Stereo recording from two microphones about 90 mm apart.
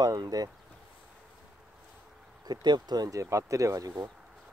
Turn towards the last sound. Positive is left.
turn(degrees=-40)  # may be behind; listen again after turning